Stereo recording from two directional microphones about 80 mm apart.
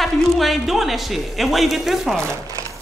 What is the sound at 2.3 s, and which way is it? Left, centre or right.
Speech, right.